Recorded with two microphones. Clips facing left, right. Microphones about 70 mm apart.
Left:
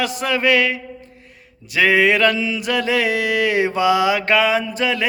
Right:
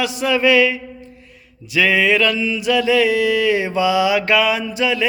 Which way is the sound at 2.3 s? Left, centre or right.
Left.